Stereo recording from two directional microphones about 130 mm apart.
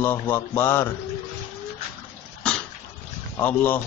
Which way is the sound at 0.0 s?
15° left (ahead or behind).